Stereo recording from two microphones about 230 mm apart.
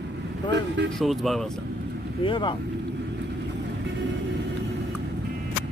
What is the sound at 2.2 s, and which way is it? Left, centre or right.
Speech, left.